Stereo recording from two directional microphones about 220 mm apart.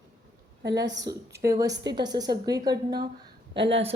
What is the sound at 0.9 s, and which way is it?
A woman's voice, 15° right (ahead or behind).